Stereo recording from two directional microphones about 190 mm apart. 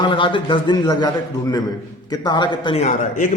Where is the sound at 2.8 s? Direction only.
40° left (ahead or behind).